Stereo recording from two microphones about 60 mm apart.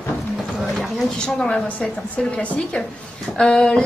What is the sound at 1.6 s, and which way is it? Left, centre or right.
Speech, left.